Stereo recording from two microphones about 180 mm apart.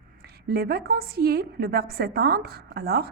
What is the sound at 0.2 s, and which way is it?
A woman's voice, 60° right (ahead or behind).